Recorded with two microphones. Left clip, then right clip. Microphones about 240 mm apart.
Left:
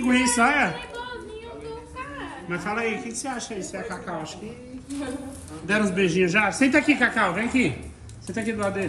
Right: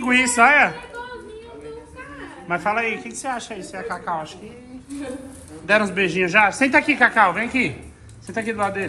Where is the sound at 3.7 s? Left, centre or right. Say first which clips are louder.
Right 6 dB; centre.